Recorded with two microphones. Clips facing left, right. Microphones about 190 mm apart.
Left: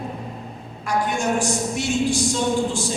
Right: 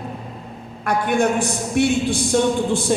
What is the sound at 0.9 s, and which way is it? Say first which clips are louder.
Speech: right 4 dB; 60° right (ahead or behind).